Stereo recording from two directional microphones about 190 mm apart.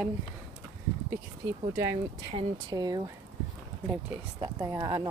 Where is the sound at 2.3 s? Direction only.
25° right (ahead or behind).